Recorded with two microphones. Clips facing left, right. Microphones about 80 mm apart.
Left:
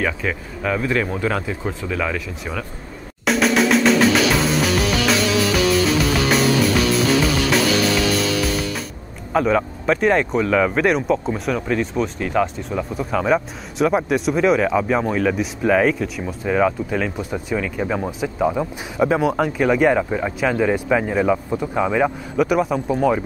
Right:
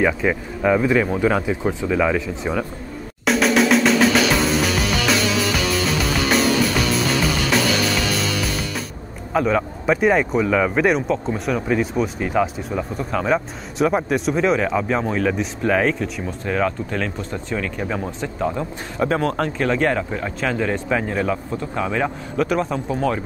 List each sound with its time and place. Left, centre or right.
0.0 s speech: centre
2.1 s speech: right
3.3 s music: centre
9.3 s speech: centre